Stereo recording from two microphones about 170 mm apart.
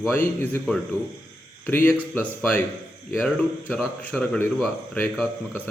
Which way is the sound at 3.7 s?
5° left (ahead or behind).